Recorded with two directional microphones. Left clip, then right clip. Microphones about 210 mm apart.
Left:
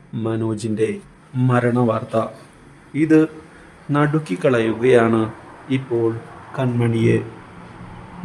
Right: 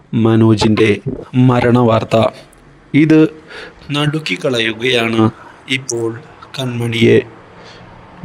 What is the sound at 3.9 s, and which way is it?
Speech, 5° left (ahead or behind).